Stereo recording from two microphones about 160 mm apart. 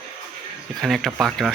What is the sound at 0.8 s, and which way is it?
Speech, centre (ahead or behind).